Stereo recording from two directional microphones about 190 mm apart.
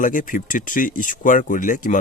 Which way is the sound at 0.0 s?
45° left (ahead or behind).